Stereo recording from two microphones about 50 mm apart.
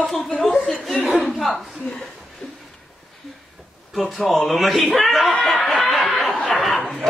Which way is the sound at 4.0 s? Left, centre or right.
Centre.